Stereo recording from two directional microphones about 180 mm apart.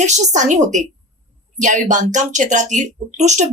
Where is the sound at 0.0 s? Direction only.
40° right (ahead or behind).